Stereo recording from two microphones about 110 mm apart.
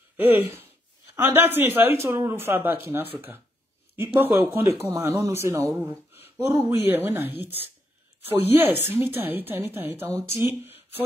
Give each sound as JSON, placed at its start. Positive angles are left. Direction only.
{"t": 1.1, "sound": "a woman's voice", "side_deg": -20}